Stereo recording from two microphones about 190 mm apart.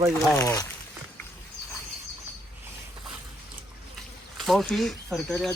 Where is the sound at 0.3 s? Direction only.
15° left (ahead or behind).